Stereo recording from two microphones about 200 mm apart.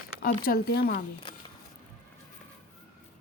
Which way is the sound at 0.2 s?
50° left (ahead or behind).